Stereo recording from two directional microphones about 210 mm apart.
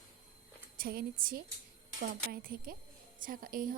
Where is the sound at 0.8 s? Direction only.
45° right (ahead or behind).